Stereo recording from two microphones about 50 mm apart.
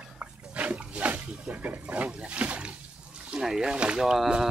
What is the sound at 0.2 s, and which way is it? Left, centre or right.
Pig, right.